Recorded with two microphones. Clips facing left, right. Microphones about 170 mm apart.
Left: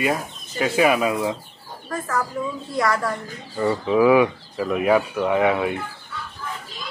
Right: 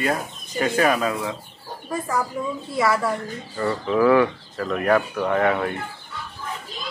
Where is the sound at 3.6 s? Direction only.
15° left (ahead or behind).